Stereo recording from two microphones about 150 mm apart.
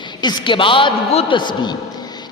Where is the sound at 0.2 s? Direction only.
30° left (ahead or behind).